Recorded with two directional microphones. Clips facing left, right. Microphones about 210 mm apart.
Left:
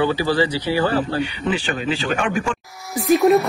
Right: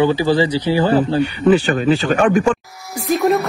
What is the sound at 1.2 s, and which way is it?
Speech, 45° right (ahead or behind).